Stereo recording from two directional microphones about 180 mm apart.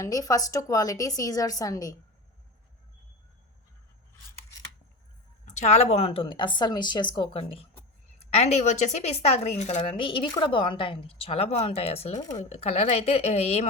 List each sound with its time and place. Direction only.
0.0 s a woman's voice: 20° left (ahead or behind)
5.5 s a woman's voice: 40° left (ahead or behind)